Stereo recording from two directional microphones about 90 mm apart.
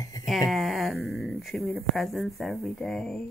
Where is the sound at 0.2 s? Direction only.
Centre (ahead or behind).